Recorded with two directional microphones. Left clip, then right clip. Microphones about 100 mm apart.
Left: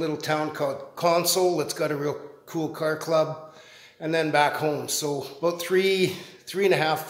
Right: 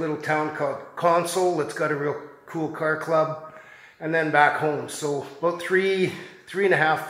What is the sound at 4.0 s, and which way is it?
Speech, 25° left (ahead or behind).